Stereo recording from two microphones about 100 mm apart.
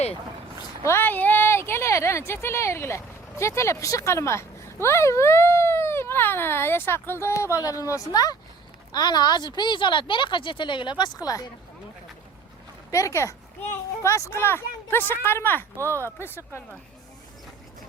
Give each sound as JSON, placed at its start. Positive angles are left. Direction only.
{"t": 0.8, "sound": "speech", "side_deg": 25}
{"t": 12.9, "sound": "speech", "side_deg": 30}